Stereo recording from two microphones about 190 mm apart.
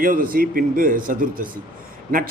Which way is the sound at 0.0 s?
50° right (ahead or behind).